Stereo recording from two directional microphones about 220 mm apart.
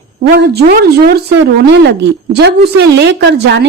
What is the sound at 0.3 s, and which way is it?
A woman's voice, 45° right (ahead or behind).